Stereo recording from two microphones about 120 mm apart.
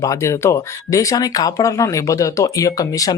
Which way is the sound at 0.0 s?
25° left (ahead or behind).